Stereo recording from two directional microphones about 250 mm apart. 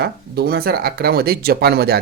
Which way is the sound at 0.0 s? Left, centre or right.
Right.